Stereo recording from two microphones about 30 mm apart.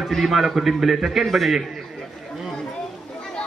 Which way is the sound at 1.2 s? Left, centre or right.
Centre.